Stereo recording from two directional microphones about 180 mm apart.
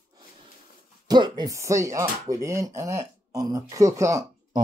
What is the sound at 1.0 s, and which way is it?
Speech, 25° right (ahead or behind).